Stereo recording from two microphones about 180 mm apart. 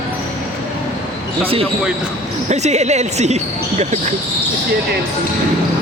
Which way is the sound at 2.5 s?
40° right (ahead or behind).